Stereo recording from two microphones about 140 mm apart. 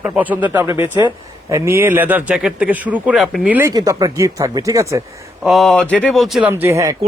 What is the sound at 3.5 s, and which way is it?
Speech, 25° right (ahead or behind).